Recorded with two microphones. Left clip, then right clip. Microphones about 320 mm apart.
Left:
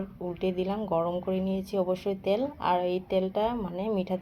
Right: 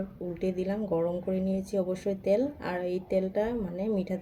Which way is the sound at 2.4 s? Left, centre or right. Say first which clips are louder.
Left 4 dB; centre.